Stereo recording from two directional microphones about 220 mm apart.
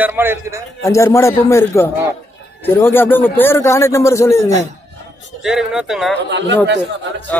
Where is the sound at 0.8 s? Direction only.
15° left (ahead or behind).